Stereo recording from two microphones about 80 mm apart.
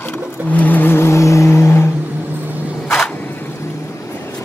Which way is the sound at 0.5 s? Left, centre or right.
Left.